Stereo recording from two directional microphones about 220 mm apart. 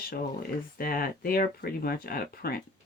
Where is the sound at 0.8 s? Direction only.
40° left (ahead or behind).